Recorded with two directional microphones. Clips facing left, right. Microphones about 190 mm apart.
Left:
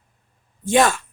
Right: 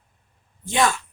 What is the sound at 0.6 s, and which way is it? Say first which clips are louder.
Speech: left 5 dB; 50° left (ahead or behind).